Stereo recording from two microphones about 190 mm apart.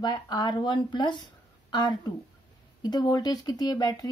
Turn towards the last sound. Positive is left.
turn(degrees=20)  # may be behind; listen again after turning